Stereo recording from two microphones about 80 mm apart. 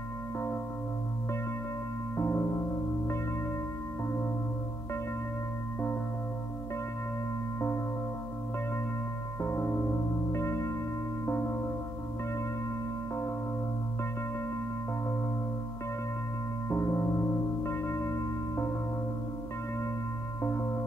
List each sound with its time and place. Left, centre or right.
2.1 s music: left
9.4 s music: left
16.6 s music: left